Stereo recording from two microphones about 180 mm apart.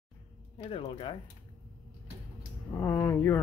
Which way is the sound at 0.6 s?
30° left (ahead or behind).